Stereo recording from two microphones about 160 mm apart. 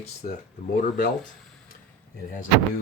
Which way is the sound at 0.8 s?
60° left (ahead or behind).